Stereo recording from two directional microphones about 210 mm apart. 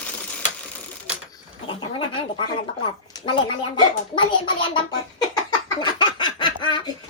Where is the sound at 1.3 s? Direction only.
25° left (ahead or behind).